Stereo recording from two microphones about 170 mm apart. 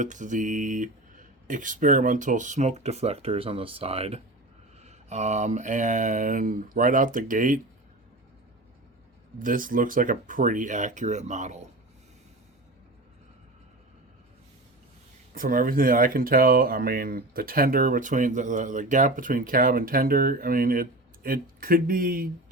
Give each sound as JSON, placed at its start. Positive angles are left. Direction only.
{"t": 0.0, "sound": "speech", "side_deg": -45}
{"t": 9.4, "sound": "speech", "side_deg": -55}
{"t": 15.4, "sound": "speech", "side_deg": -55}